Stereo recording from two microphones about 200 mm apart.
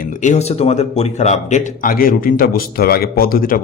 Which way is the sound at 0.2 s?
35° left (ahead or behind).